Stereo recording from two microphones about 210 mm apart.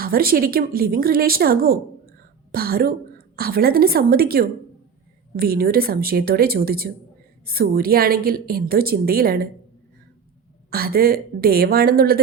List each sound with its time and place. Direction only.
0.0 s a woman's voice: 45° right (ahead or behind)
10.7 s a woman's voice: 45° right (ahead or behind)